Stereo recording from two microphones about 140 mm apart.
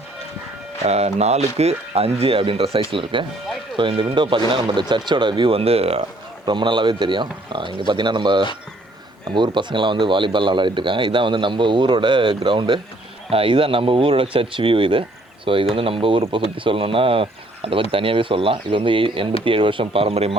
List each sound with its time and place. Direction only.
0.9 s speech: 50° right (ahead or behind)